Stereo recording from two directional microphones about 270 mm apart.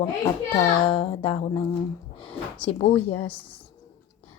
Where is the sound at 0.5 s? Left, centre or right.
Centre.